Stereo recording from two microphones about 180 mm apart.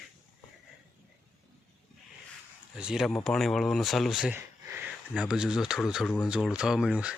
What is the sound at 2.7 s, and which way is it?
Speech, 5° right (ahead or behind).